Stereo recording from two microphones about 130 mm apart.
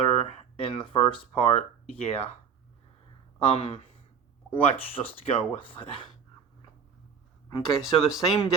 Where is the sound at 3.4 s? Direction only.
45° left (ahead or behind).